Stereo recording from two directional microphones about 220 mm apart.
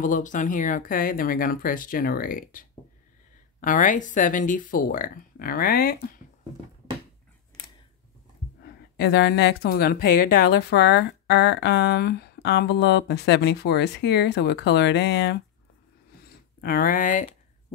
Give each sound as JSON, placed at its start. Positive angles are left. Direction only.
{"t": 0.0, "sound": "speech", "side_deg": 35}
{"t": 3.6, "sound": "speech", "side_deg": 35}
{"t": 8.9, "sound": "a woman's voice", "side_deg": 50}
{"t": 16.6, "sound": "speech", "side_deg": 40}